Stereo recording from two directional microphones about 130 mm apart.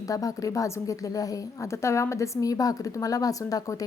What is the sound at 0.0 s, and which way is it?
A woman's voice, 25° left (ahead or behind).